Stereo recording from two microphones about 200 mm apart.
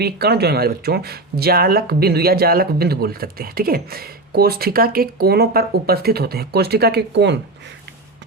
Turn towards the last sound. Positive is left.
turn(degrees=-60)  # may be behind; listen again after turning